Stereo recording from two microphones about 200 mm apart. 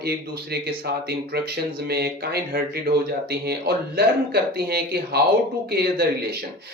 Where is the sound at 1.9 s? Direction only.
50° right (ahead or behind).